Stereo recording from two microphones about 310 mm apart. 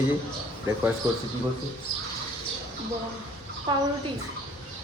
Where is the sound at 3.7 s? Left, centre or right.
Centre.